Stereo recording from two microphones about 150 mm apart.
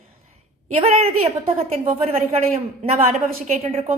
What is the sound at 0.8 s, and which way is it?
A woman's voice, 40° right (ahead or behind).